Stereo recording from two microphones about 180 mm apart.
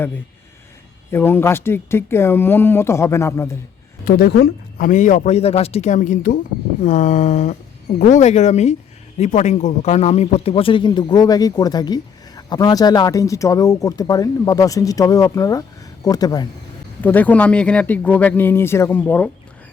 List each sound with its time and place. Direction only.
1.1 s speech: 15° left (ahead or behind)
4.0 s a man's voice: 60° left (ahead or behind); by 16.5 s 20° left (ahead or behind)
17.0 s speech: 10° left (ahead or behind)